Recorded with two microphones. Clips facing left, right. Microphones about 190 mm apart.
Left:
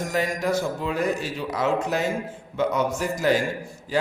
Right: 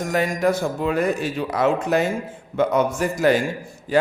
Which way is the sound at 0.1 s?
55° right (ahead or behind).